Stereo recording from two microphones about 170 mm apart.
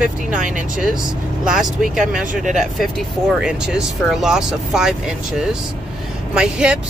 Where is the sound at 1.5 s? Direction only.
5° right (ahead or behind).